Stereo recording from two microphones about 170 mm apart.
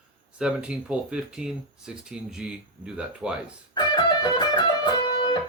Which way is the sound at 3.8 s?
25° left (ahead or behind).